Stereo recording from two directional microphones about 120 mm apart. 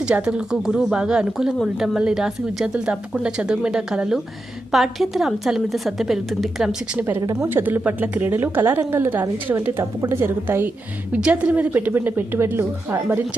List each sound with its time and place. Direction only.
0.0 s a woman's voice: 10° right (ahead or behind)
7.4 s a woman's voice: 15° right (ahead or behind)